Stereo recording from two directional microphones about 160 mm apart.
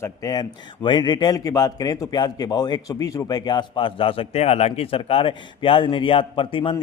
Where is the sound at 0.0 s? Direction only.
20° left (ahead or behind).